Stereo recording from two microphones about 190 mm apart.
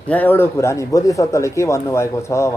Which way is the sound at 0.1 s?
10° left (ahead or behind).